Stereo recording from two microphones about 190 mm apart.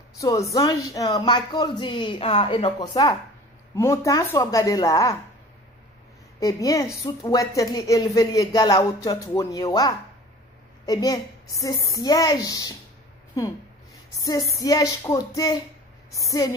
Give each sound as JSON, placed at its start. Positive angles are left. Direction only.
{"t": 0.2, "sound": "a woman's voice", "side_deg": 15}
{"t": 6.4, "sound": "a woman's voice", "side_deg": 20}